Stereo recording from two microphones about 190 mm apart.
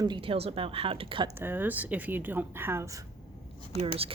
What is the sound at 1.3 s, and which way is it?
Speech, 10° right (ahead or behind).